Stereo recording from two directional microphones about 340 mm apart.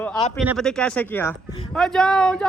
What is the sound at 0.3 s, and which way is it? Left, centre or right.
Speech, centre.